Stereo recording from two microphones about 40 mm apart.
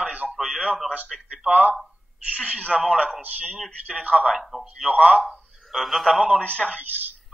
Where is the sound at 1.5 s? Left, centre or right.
Right.